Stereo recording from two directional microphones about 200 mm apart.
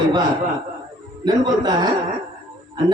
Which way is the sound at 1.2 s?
20° right (ahead or behind).